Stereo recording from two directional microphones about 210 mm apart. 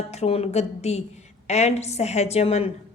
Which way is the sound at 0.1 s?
30° left (ahead or behind).